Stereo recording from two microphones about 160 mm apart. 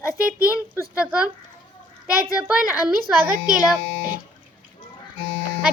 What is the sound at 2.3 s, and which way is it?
Speech, 10° right (ahead or behind).